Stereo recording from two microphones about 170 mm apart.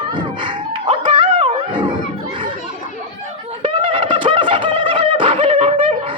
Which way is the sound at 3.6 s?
30° right (ahead or behind).